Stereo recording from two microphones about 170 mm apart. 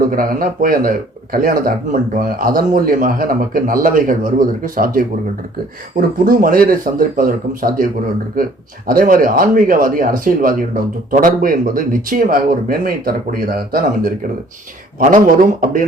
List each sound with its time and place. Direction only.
0.0 s speech: 55° right (ahead or behind)
8.9 s speech: 55° right (ahead or behind)
14.9 s speech: 50° right (ahead or behind)